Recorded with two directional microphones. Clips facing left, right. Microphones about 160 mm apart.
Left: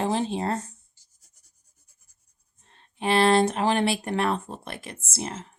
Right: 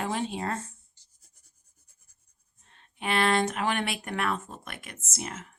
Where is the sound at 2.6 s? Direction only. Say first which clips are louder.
Left 6 dB; 35° left (ahead or behind).